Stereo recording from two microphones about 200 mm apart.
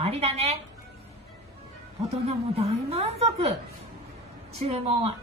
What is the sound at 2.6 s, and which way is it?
Speech, 30° right (ahead or behind).